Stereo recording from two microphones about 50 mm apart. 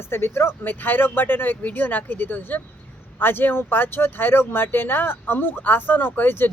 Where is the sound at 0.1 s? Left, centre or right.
Left.